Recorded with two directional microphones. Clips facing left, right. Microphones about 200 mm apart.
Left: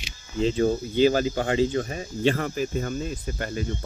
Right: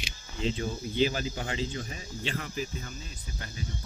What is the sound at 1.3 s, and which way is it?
Cricket, 55° left (ahead or behind).